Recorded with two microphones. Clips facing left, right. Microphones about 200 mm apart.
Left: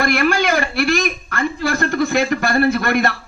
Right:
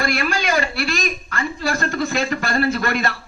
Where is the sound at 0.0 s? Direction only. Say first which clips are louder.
Left 5 dB; 60° left (ahead or behind).